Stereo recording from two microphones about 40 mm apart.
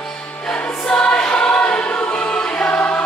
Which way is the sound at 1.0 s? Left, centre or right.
Left.